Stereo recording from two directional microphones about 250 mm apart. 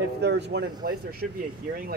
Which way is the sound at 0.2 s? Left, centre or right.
Right.